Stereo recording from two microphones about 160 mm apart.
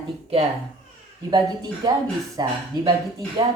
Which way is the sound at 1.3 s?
25° right (ahead or behind).